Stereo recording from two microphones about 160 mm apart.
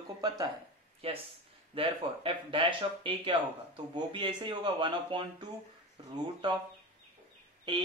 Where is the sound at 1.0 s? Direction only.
40° right (ahead or behind).